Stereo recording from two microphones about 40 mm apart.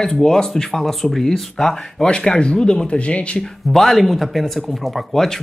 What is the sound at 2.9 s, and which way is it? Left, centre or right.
Speech, left.